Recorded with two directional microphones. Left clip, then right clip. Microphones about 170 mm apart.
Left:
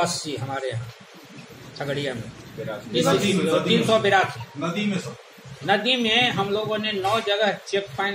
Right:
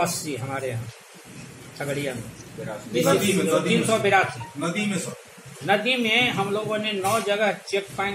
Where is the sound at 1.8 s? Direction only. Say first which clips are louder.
Left 1 dB; 15° right (ahead or behind).